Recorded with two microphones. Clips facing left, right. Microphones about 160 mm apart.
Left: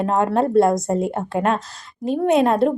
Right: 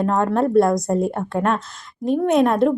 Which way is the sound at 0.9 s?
Centre (ahead or behind).